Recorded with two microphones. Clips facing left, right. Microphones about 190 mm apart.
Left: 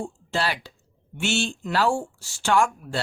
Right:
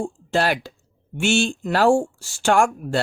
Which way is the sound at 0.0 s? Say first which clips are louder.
Right 6 dB; 45° right (ahead or behind).